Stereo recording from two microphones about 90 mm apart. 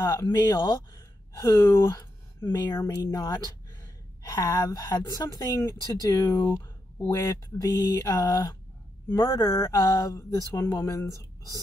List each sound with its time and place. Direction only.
0.0 s speech: 45° left (ahead or behind)
7.2 s speech: 45° left (ahead or behind)
10.6 s speech: 30° left (ahead or behind)